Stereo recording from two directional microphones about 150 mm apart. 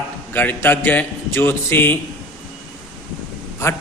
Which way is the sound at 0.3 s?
15° left (ahead or behind).